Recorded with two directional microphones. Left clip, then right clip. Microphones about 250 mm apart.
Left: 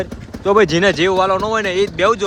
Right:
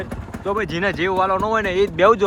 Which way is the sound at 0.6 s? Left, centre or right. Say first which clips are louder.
Left 8 dB; centre.